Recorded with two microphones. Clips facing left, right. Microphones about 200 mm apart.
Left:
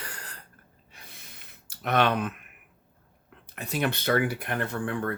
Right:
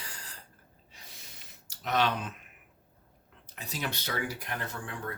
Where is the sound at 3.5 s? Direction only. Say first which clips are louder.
Left 8 dB; 60° left (ahead or behind).